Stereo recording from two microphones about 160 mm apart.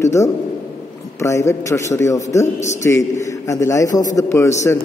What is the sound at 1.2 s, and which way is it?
A man's voice, 20° left (ahead or behind).